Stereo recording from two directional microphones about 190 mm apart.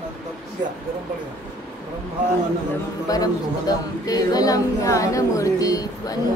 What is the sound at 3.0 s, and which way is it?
Speech, 20° left (ahead or behind).